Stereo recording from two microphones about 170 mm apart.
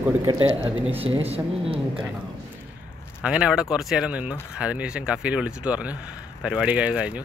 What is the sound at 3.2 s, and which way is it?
Speech, 5° right (ahead or behind).